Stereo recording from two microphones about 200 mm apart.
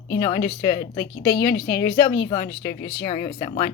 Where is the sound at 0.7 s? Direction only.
55° left (ahead or behind).